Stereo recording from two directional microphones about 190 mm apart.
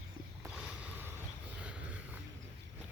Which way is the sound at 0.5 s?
10° right (ahead or behind).